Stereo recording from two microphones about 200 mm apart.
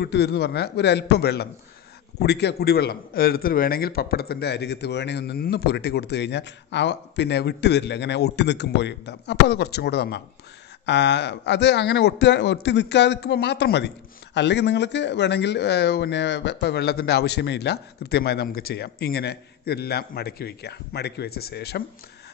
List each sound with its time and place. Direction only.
0.0 s a man's voice: 55° left (ahead or behind)